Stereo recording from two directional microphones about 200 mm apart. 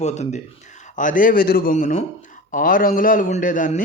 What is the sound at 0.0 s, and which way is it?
A man's voice, 35° left (ahead or behind).